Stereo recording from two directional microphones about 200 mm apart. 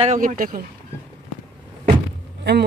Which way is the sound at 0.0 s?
40° right (ahead or behind).